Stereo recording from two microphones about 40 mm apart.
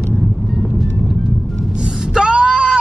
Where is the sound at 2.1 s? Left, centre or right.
Right.